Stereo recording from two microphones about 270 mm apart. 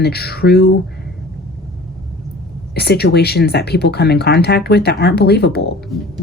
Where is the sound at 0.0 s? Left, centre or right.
Left.